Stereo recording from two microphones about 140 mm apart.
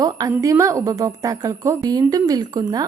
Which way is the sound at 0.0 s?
25° right (ahead or behind).